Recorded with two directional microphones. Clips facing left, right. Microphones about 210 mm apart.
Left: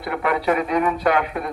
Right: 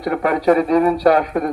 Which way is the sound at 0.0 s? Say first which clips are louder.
Right 5 dB; 40° right (ahead or behind).